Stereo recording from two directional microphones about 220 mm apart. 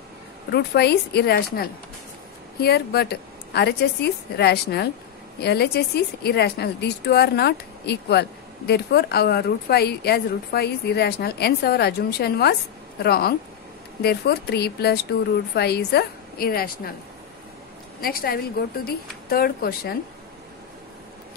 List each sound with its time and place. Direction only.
0.5 s a woman's voice: 50° left (ahead or behind)
18.0 s a woman's voice: 45° left (ahead or behind)